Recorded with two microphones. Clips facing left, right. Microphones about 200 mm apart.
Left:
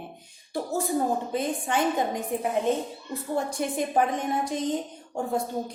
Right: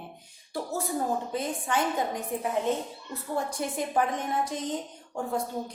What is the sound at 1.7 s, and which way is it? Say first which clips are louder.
A woman's voice: left 2 dB; 25° left (ahead or behind).